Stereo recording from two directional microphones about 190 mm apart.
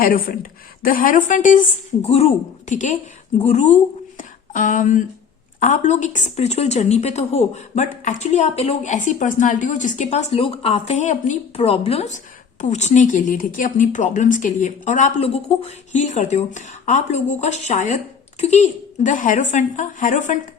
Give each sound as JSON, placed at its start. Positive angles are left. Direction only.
{"t": 0.0, "sound": "a woman's voice", "side_deg": 50}
{"t": 4.2, "sound": "a sound", "side_deg": 45}
{"t": 5.5, "sound": "a woman's voice", "side_deg": 40}